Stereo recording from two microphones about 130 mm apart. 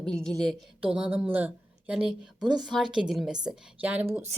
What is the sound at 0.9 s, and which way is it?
A woman's voice, 10° right (ahead or behind).